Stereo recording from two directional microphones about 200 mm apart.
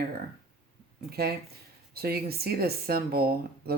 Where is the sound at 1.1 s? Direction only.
50° right (ahead or behind).